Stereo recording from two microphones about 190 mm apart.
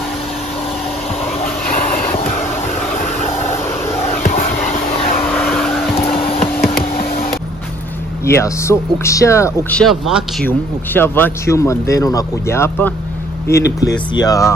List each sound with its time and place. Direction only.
1.4 s vehicle: 45° left (ahead or behind)
2.9 s a sound: 35° left (ahead or behind)
5.3 s vehicle: 5° left (ahead or behind)
5.9 s a sound: 30° left (ahead or behind)
8.3 s speech: 15° left (ahead or behind)
10.4 s speech: 10° left (ahead or behind)